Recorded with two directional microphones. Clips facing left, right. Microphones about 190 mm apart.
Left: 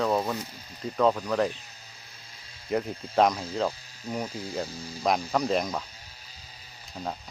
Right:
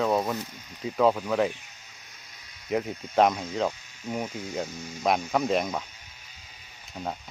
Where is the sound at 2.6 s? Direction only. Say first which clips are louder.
Even; centre (ahead or behind).